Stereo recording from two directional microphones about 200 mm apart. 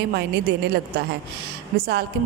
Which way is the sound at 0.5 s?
55° right (ahead or behind).